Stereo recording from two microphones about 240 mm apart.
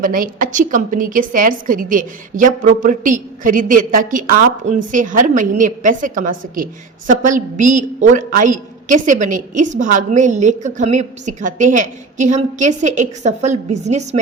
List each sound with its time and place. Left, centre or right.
0.0 s a woman's voice: right